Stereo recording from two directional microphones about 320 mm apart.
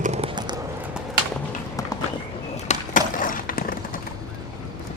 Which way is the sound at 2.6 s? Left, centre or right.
Left.